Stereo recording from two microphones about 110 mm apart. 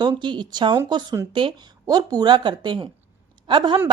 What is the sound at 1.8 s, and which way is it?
A woman's voice, 35° right (ahead or behind).